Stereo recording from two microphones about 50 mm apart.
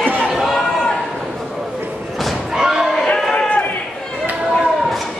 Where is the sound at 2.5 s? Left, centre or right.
Centre.